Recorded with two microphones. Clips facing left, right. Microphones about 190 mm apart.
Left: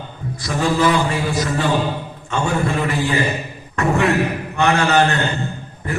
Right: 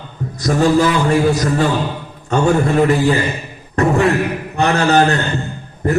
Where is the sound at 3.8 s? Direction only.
35° right (ahead or behind).